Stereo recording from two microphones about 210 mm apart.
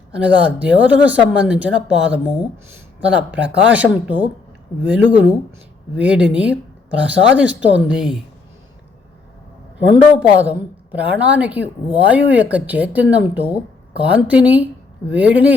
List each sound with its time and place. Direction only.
0.1 s a woman's voice: 5° right (ahead or behind)
10.2 s a woman's voice: 5° right (ahead or behind)